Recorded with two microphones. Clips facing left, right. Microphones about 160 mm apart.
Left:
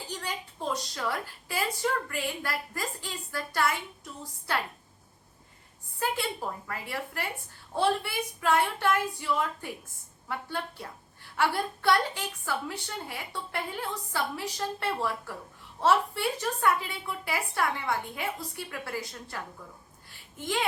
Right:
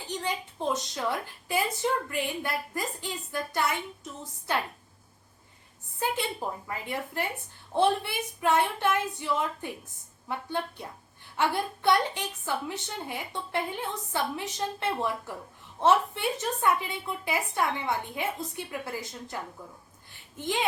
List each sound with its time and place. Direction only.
0.1 s a woman's voice: 20° right (ahead or behind)
6.0 s a woman's voice: 20° right (ahead or behind)